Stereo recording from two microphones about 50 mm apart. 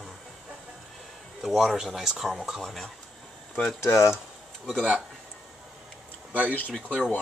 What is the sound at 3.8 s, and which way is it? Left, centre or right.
Speech, left.